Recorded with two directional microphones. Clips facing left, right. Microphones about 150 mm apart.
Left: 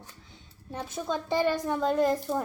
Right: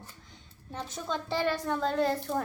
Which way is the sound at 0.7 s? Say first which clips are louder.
Left 3 dB; 10° left (ahead or behind).